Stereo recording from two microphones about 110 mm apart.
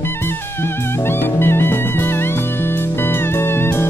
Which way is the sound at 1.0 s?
20° left (ahead or behind).